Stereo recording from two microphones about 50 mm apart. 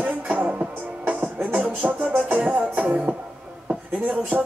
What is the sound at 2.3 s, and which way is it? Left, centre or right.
Music, centre.